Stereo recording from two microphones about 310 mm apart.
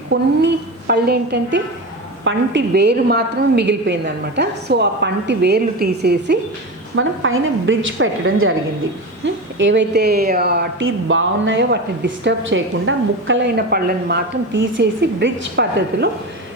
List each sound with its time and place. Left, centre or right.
0.1 s a woman's voice: right